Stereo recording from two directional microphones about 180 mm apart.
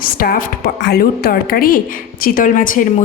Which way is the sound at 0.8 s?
60° left (ahead or behind).